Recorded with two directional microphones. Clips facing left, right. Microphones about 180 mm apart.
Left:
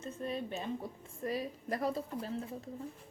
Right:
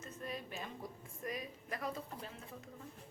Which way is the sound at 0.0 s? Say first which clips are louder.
Left 7 dB; 30° left (ahead or behind).